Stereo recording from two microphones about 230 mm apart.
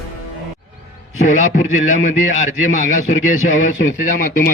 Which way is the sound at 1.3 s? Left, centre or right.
Left.